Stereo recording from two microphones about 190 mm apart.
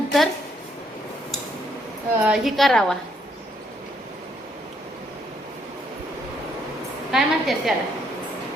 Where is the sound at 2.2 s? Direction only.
Centre (ahead or behind).